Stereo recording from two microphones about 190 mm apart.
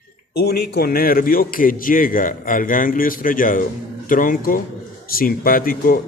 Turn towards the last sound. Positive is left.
turn(degrees=50)  # may be behind; listen again after turning